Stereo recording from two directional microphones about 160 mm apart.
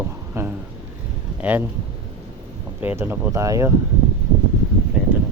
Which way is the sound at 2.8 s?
15° right (ahead or behind).